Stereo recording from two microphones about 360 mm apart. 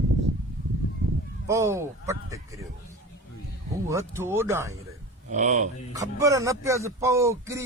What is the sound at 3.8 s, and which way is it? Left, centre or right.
Speech, centre.